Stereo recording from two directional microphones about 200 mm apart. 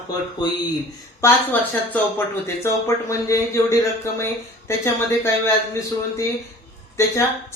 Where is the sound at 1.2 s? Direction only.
10° left (ahead or behind).